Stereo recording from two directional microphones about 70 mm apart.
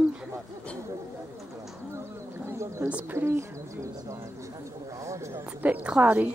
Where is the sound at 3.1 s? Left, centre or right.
Right.